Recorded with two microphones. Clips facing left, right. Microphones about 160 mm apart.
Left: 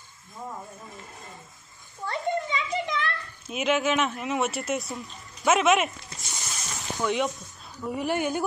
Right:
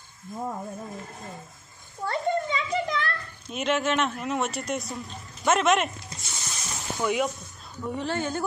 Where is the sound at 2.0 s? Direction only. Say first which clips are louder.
Right 2 dB; 40° right (ahead or behind).